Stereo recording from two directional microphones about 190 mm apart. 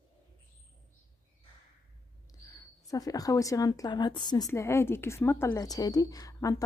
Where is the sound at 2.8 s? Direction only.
20° left (ahead or behind).